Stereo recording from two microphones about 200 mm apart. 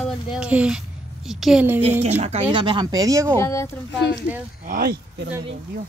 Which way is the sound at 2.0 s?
30° right (ahead or behind).